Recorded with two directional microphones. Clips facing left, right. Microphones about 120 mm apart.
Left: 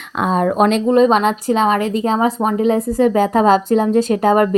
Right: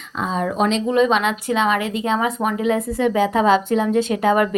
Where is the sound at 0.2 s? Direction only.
55° left (ahead or behind).